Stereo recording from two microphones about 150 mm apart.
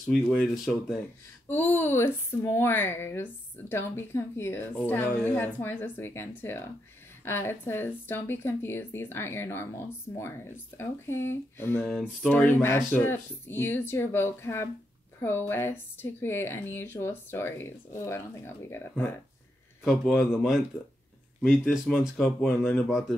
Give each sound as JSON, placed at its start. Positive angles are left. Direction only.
{"t": 0.1, "sound": "a woman's voice", "side_deg": 10}
{"t": 1.5, "sound": "a woman's voice", "side_deg": 15}
{"t": 11.9, "sound": "a woman's voice", "side_deg": 5}
{"t": 19.8, "sound": "speech", "side_deg": 0}
{"t": 22.0, "sound": "speech", "side_deg": 0}